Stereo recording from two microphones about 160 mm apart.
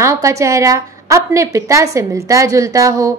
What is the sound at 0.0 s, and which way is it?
A woman's voice, 20° right (ahead or behind).